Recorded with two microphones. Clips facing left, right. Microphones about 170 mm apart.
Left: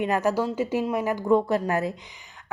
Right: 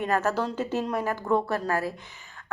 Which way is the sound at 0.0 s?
15° left (ahead or behind).